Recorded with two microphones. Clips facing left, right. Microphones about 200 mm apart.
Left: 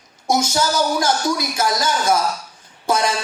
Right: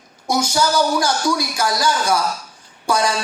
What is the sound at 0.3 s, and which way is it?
Speech, 25° left (ahead or behind).